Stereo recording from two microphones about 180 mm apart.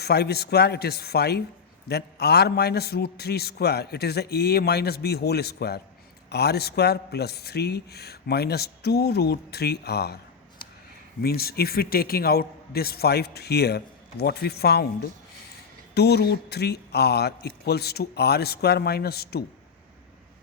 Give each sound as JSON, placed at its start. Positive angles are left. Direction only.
{"t": 0.0, "sound": "a man's voice", "side_deg": 65}
{"t": 11.2, "sound": "a man's voice", "side_deg": 60}